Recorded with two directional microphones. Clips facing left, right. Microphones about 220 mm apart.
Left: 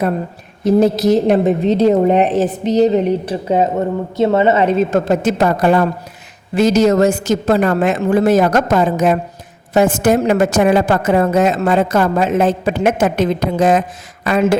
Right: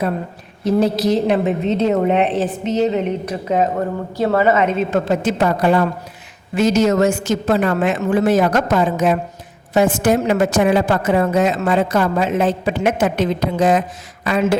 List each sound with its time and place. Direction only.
0.6 s a woman's voice: 45° left (ahead or behind)
6.5 s a woman's voice: 35° left (ahead or behind)